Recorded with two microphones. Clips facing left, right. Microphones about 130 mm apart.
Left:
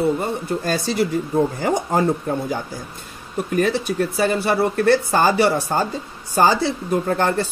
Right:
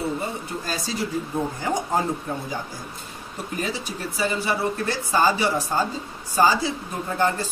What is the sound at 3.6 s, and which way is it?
Speech, 60° left (ahead or behind).